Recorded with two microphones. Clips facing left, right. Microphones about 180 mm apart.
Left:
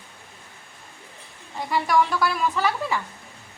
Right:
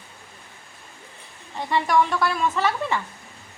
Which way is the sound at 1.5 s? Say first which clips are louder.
Right 1 dB; centre (ahead or behind).